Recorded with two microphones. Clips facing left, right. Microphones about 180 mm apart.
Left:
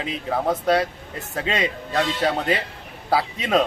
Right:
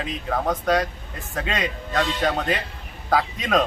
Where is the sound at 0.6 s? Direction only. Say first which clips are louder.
Left 2 dB; 30° left (ahead or behind).